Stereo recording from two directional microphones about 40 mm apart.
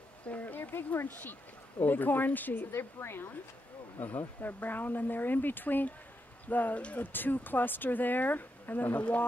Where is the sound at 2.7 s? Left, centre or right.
Left.